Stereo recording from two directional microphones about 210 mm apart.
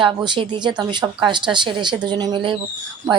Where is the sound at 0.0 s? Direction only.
25° right (ahead or behind).